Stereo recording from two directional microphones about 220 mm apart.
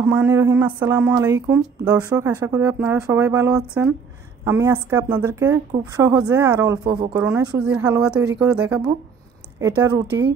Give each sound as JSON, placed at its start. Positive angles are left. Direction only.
{"t": 0.0, "sound": "a woman's voice", "side_deg": -10}